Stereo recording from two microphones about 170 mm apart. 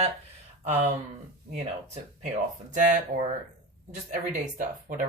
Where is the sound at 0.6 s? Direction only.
40° right (ahead or behind).